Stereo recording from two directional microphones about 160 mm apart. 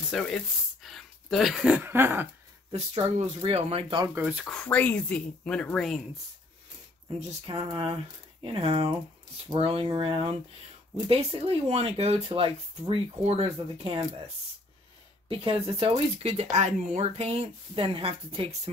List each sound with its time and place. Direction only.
0.1 s speech: 5° left (ahead or behind); by 2.2 s 15° right (ahead or behind)
2.7 s speech: 40° right (ahead or behind)
4.1 s speech: 10° right (ahead or behind)
4.5 s speech: 5° left (ahead or behind)
7.2 s speech: 35° right (ahead or behind)
15.2 s speech: 35° right (ahead or behind)